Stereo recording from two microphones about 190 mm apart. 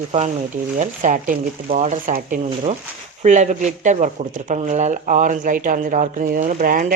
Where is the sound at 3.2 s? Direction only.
40° right (ahead or behind).